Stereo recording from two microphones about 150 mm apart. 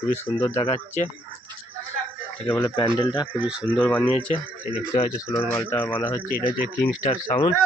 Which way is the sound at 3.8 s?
5° left (ahead or behind).